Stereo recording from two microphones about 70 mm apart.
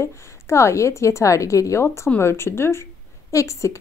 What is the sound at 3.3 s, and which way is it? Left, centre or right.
Speech, left.